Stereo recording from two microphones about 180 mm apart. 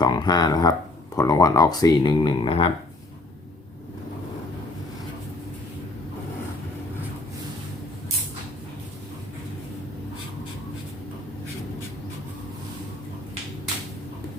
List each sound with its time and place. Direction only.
0.0 s speech: 25° left (ahead or behind)